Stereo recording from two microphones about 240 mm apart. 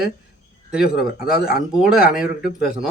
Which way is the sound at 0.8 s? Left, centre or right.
Left.